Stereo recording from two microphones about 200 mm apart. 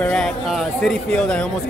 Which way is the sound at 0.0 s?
5° left (ahead or behind).